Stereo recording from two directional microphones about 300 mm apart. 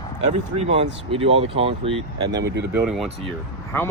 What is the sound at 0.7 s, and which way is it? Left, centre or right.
Speech, centre.